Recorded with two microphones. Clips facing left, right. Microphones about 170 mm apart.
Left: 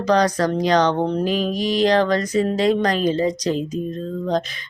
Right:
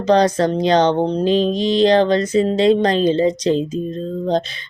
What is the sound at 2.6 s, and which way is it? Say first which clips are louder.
Speech: right 5 dB; 30° right (ahead or behind).